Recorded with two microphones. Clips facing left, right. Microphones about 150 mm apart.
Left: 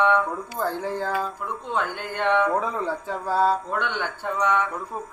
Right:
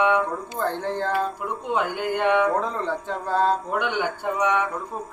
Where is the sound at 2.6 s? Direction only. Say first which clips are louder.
Even; 5° left (ahead or behind).